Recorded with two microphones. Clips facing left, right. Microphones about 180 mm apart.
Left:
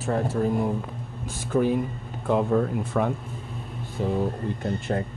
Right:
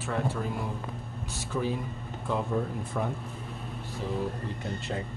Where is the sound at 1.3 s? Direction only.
55° left (ahead or behind); by 3.1 s 70° left (ahead or behind).